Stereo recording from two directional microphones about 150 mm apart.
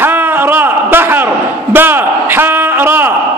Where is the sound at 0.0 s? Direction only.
15° right (ahead or behind).